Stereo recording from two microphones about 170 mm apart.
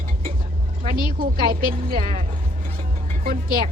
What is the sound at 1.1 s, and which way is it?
Speech, 60° right (ahead or behind).